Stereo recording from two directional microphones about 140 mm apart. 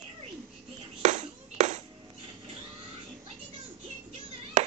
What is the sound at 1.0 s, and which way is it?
Music, 55° right (ahead or behind).